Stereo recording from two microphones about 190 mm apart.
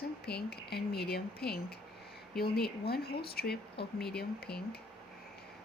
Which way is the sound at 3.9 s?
5° left (ahead or behind).